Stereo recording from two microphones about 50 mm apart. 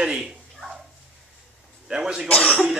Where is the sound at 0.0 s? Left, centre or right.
Centre.